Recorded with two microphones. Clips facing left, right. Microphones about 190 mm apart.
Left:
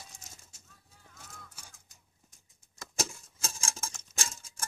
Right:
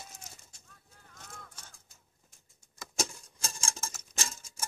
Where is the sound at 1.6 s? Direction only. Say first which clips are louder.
Right 1 dB; 15° left (ahead or behind).